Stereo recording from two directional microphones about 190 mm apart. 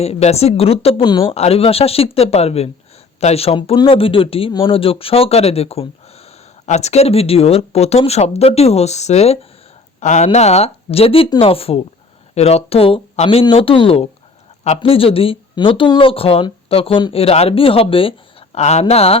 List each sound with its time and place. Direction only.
0.0 s speech: 35° left (ahead or behind)